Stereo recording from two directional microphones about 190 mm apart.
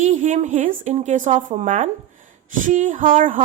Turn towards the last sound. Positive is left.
turn(degrees=-45)  # may be behind; listen again after turning